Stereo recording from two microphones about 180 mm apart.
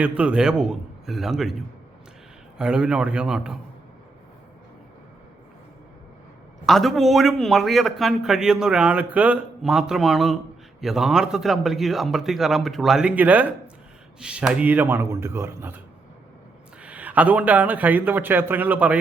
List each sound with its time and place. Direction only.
0.0 s a man's voice: 5° right (ahead or behind)
2.6 s a man's voice: 5° right (ahead or behind)
6.7 s a man's voice: centre (ahead or behind)
16.8 s a man's voice: 10° right (ahead or behind)